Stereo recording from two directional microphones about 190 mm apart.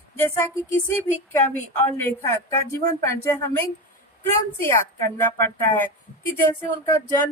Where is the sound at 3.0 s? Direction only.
15° left (ahead or behind).